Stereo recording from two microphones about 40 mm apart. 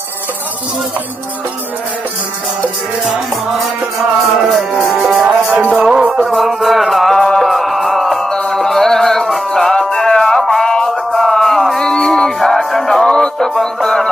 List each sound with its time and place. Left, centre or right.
4.2 s music: centre
5.2 s music: right
6.1 s music: centre
11.9 s music: centre
12.4 s music: centre
13.1 s music: centre